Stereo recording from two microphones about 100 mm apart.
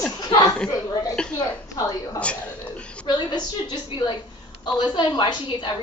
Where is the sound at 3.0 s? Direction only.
45° left (ahead or behind).